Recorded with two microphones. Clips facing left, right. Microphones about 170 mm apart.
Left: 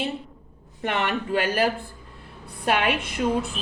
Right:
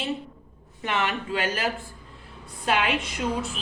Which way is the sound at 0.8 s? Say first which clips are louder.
Left 2 dB; 55° left (ahead or behind).